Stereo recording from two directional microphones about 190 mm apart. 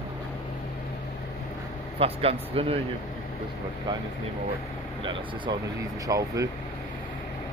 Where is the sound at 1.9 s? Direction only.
30° right (ahead or behind).